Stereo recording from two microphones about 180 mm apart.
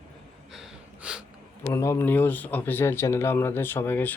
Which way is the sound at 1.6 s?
15° left (ahead or behind).